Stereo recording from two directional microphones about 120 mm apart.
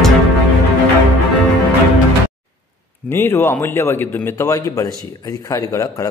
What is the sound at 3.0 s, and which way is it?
A man's voice, 20° left (ahead or behind).